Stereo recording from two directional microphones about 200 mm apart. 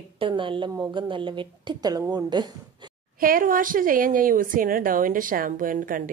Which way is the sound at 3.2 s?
45° right (ahead or behind).